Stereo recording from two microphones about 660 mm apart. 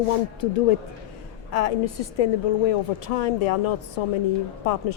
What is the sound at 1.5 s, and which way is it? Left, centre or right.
A woman's voice, left.